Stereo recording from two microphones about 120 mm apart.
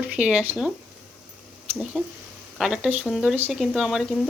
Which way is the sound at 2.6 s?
5° right (ahead or behind).